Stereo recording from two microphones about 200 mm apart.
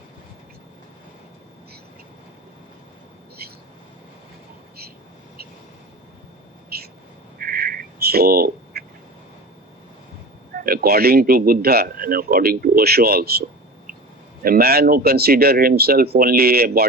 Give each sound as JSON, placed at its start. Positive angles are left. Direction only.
{"t": 7.3, "sound": "duck", "side_deg": -45}
{"t": 10.5, "sound": "a man's voice", "side_deg": -45}
{"t": 14.4, "sound": "a man's voice", "side_deg": -50}